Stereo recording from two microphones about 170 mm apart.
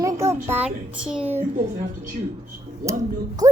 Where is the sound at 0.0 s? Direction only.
20° right (ahead or behind).